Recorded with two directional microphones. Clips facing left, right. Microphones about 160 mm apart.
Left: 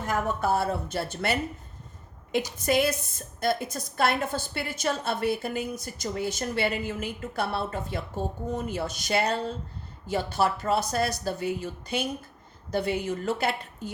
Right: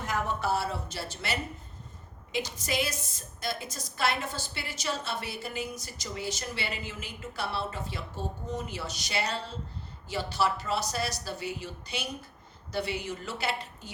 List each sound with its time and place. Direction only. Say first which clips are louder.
0.0 s a woman's voice: left 4 dB; 50° left (ahead or behind)